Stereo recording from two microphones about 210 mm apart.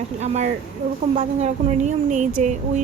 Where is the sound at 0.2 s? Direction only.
35° right (ahead or behind).